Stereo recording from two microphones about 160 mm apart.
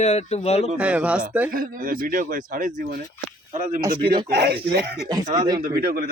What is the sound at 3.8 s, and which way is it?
Speech, 30° right (ahead or behind).